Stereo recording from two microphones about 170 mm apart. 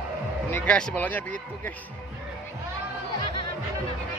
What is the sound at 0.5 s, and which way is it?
Speech, 10° left (ahead or behind).